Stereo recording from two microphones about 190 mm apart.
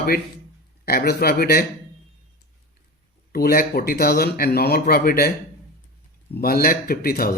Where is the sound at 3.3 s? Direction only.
50° left (ahead or behind).